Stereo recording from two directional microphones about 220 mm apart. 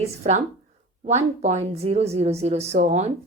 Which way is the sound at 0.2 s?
30° right (ahead or behind).